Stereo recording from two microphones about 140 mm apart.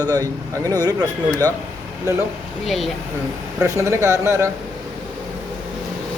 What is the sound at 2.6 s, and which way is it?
Speech, centre (ahead or behind).